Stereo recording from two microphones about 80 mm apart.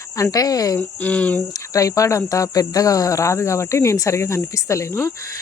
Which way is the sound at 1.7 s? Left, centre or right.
Left.